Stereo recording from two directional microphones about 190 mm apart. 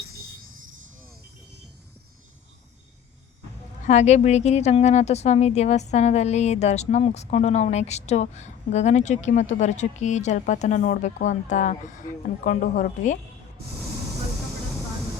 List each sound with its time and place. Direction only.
3.8 s speech: 35° left (ahead or behind)